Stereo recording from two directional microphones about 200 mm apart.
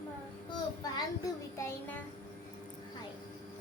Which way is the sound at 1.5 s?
15° left (ahead or behind).